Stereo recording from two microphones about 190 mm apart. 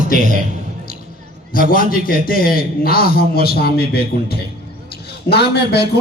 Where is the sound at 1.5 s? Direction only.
50° left (ahead or behind).